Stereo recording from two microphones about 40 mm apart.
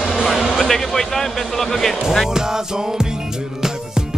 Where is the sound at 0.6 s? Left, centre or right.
Centre.